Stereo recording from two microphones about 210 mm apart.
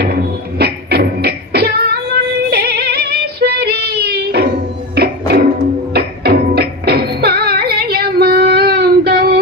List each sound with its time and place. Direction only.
0.6 s music: 50° right (ahead or behind)
2.5 s female singing: 50° right (ahead or behind)
4.9 s music: 50° right (ahead or behind)